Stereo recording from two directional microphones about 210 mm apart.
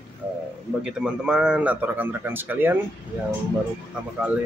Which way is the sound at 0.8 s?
5° right (ahead or behind).